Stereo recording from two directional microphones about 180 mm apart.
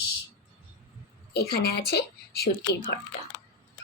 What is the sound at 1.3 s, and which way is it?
Speech, 60° left (ahead or behind).